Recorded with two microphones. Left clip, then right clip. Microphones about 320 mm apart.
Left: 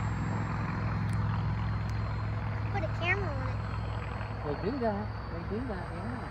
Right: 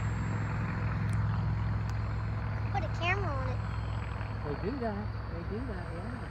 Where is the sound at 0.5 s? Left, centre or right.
Left.